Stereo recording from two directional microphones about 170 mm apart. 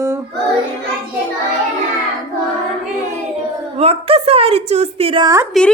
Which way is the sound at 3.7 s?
35° right (ahead or behind).